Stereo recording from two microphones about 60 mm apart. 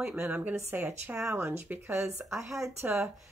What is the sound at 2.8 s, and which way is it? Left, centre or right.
Speech, right.